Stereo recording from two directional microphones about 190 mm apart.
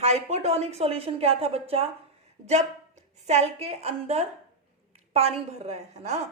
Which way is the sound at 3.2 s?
35° right (ahead or behind).